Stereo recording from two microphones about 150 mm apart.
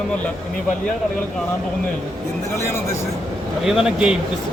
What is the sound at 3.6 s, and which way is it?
Speech, 5° right (ahead or behind).